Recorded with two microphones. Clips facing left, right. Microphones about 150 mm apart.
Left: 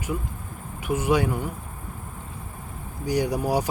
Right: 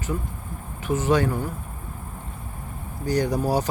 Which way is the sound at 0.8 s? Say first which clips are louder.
Right 1 dB; 10° left (ahead or behind).